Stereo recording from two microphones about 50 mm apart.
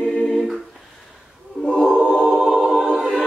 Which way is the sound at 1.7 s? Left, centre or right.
Left.